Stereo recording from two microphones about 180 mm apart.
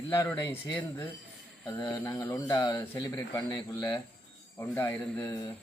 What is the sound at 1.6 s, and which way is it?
A man's voice, 25° left (ahead or behind).